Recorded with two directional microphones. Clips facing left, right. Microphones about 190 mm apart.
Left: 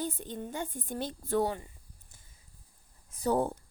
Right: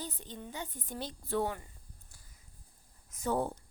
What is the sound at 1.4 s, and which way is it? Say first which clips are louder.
Speech: left 4 dB; 30° left (ahead or behind).